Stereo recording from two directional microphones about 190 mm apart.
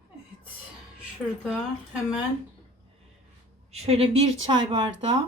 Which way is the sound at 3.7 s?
30° right (ahead or behind).